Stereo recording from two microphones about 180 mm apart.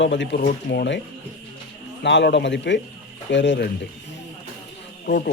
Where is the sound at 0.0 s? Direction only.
85° left.